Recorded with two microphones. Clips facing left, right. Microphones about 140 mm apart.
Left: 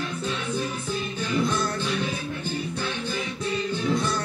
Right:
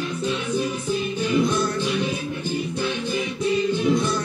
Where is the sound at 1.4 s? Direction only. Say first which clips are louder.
Right 4 dB; 15° right (ahead or behind).